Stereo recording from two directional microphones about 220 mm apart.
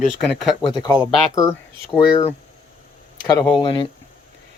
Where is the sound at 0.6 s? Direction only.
20° left (ahead or behind).